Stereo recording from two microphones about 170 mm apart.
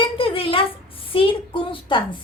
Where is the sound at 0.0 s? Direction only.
30° left (ahead or behind).